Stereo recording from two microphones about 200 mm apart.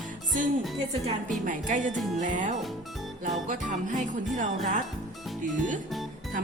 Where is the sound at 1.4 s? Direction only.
40° right (ahead or behind).